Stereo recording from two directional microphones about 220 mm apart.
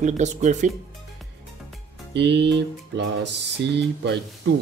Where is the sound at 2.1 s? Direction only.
50° right (ahead or behind).